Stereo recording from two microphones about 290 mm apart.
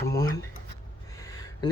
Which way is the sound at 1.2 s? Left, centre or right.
Centre.